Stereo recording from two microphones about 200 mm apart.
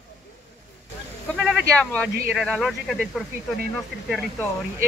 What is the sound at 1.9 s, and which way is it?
Speech, 5° left (ahead or behind).